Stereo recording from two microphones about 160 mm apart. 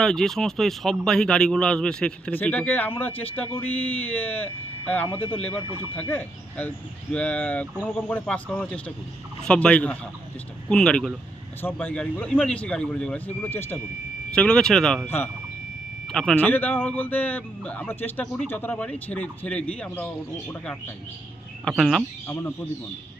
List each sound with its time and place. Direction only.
0.0 s speech: 5° left (ahead or behind)
15.0 s speech: 15° left (ahead or behind)
21.6 s speech: centre (ahead or behind)